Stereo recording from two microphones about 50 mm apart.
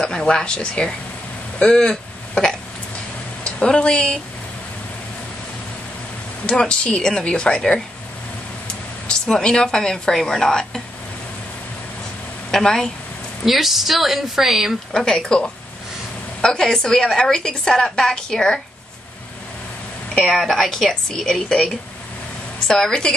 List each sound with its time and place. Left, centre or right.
0.0 s speech: centre
6.7 s a woman's voice: centre
9.0 s a sound: centre
9.3 s a woman's voice: centre
12.4 s speech: centre
13.5 s a woman's voice: centre
14.9 s a woman's voice: centre
20.2 s a woman's voice: centre